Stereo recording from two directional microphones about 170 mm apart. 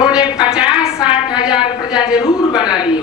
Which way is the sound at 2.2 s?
30° left (ahead or behind).